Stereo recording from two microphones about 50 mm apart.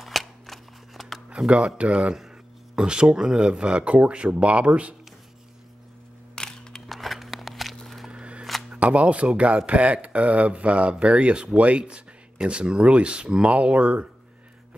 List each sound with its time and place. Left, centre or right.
0.0 s scissors: centre
1.8 s speech: right
6.3 s a sound: centre
6.9 s walk: centre
8.1 s single-lens reflex camera: right
8.7 s speech: right